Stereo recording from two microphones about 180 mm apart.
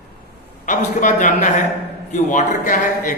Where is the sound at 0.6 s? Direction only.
45° left (ahead or behind).